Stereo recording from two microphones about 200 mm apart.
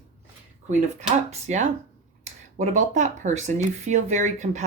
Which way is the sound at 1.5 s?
35° right (ahead or behind).